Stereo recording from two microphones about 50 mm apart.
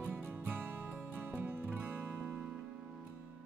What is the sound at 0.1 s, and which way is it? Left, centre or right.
Music, right.